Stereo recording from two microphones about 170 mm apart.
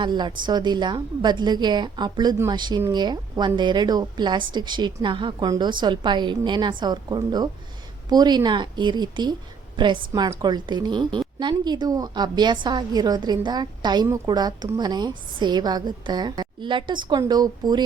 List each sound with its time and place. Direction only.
0.0 s a woman's voice: 25° right (ahead or behind)